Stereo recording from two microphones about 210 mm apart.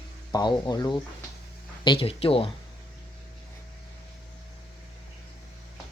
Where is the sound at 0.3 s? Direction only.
20° left (ahead or behind).